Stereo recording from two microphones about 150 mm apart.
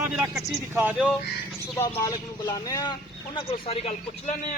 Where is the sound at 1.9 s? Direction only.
20° left (ahead or behind); by 4.3 s 40° left (ahead or behind).